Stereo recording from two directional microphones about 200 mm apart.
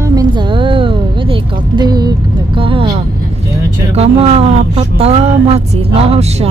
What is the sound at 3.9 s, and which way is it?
Speech, 30° right (ahead or behind).